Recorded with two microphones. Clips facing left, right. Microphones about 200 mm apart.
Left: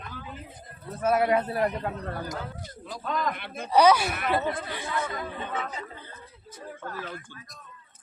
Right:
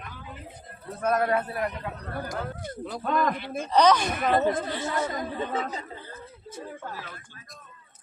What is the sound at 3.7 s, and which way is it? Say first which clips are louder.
Speech: left 1 dB; 10° left (ahead or behind).